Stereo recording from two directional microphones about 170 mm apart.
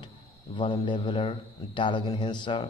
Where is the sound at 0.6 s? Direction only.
30° left (ahead or behind).